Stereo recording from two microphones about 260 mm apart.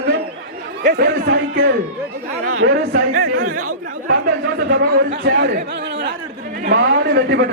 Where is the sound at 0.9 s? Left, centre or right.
Right.